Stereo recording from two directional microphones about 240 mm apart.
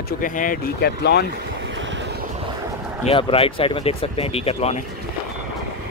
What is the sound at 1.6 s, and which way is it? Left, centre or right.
Vehicle, right.